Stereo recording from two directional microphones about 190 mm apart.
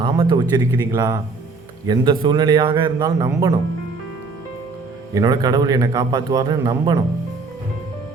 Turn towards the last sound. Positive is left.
turn(degrees=-20)  # may be behind; listen again after turning